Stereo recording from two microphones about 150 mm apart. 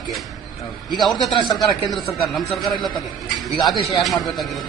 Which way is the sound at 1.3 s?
30° left (ahead or behind).